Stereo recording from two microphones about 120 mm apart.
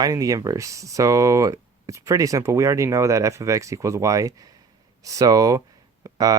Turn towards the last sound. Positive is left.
turn(degrees=-30)  # may be behind; listen again after turning